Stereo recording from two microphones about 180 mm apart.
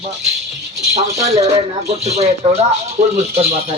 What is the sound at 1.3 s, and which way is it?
Speech, 35° right (ahead or behind).